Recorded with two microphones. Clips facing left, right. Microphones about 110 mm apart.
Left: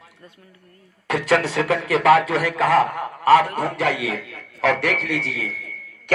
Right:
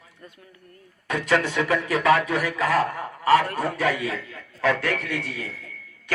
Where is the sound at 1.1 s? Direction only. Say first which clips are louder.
Left 3 dB; 85° left.